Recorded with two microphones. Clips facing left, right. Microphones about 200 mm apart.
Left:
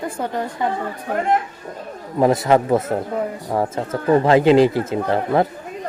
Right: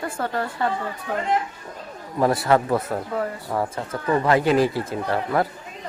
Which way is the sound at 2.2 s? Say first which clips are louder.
Left 4 dB; 20° left (ahead or behind).